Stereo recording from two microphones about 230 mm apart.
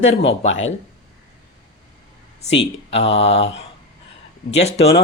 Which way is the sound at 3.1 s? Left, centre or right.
Left.